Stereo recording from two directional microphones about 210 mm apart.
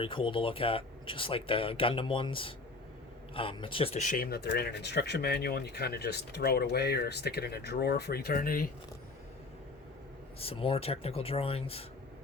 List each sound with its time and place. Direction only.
0.0 s speech: 25° left (ahead or behind); by 8.7 s 45° left (ahead or behind)
10.4 s speech: 25° left (ahead or behind)